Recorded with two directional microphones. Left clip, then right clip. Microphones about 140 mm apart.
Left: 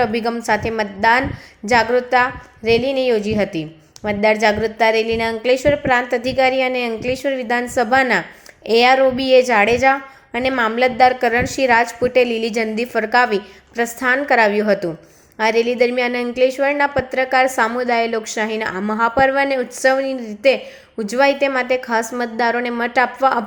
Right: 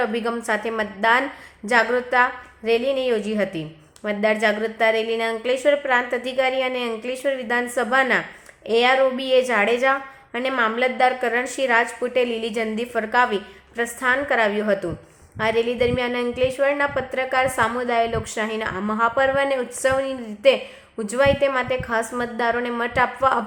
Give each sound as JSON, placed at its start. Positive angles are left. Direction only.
{"t": 0.0, "sound": "a woman's voice", "side_deg": 25}